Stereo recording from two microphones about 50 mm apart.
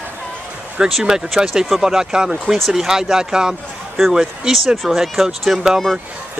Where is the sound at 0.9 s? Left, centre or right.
Centre.